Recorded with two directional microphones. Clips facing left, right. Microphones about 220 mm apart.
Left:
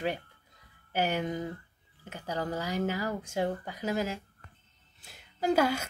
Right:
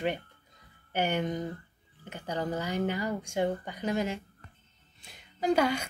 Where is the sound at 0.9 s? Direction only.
5° left (ahead or behind).